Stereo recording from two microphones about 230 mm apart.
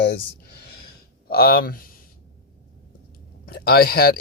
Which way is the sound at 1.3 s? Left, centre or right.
Left.